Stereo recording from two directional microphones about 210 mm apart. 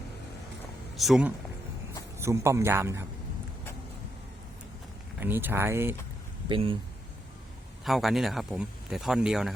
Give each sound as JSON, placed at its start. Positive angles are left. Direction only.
{"t": 0.9, "sound": "speech", "side_deg": 0}
{"t": 2.1, "sound": "speech", "side_deg": -15}
{"t": 5.2, "sound": "speech", "side_deg": -10}
{"t": 6.5, "sound": "speech", "side_deg": -25}
{"t": 7.9, "sound": "speech", "side_deg": 0}